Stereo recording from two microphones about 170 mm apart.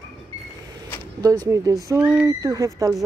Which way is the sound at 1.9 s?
10° right (ahead or behind).